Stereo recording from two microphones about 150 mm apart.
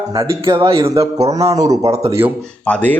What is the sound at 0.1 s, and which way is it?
Speech, 20° right (ahead or behind).